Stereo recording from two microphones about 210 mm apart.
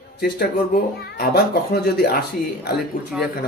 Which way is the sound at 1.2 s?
50° left (ahead or behind).